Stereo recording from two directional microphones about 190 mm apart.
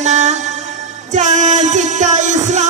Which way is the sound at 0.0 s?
40° right (ahead or behind).